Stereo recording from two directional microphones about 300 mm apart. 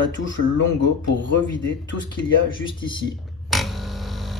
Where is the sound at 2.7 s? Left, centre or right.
Centre.